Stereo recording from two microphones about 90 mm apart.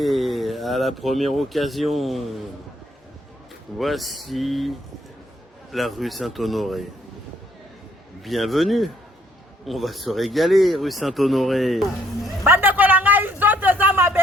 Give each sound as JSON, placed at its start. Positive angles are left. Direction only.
{"t": 0.0, "sound": "speech", "side_deg": 0}
{"t": 3.8, "sound": "speech", "side_deg": 0}
{"t": 5.7, "sound": "speech", "side_deg": 0}
{"t": 8.2, "sound": "speech", "side_deg": 0}
{"t": 12.5, "sound": "a sound", "side_deg": -20}